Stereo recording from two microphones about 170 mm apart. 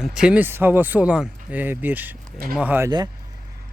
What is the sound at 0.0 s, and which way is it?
Speech, 5° right (ahead or behind).